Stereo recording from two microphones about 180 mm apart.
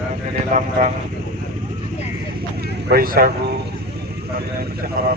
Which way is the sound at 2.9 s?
55° right (ahead or behind).